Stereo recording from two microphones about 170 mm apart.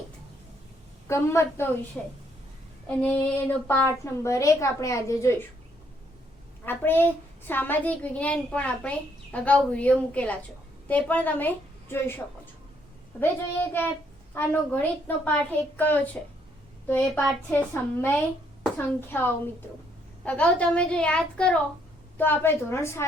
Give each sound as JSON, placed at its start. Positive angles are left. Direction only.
{"t": 1.0, "sound": "a woman's voice", "side_deg": 15}
{"t": 2.8, "sound": "a woman's voice", "side_deg": 10}
{"t": 6.7, "sound": "a woman's voice", "side_deg": 10}
{"t": 14.3, "sound": "a woman's voice", "side_deg": 10}